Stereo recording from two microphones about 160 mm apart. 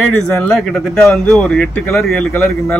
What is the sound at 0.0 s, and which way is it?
Speech, centre (ahead or behind).